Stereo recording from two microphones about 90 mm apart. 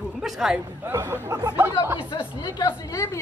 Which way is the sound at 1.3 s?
40° right (ahead or behind).